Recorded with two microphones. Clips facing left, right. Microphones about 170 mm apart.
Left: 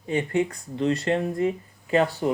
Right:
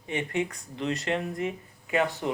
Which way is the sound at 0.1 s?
35° left (ahead or behind).